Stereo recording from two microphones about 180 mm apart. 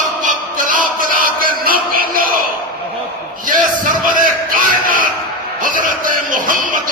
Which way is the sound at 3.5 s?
45° right (ahead or behind).